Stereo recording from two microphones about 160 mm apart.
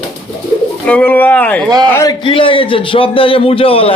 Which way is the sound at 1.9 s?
20° left (ahead or behind).